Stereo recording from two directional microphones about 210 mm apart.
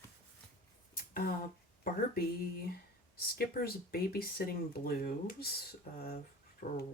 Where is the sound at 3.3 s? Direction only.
45° left (ahead or behind).